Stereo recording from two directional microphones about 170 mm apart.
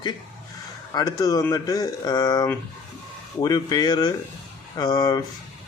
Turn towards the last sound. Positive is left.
turn(degrees=25)  # may be behind; listen again after turning